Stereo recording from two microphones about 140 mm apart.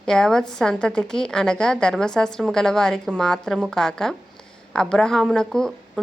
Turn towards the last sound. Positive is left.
turn(degrees=5)  # may be behind; listen again after turning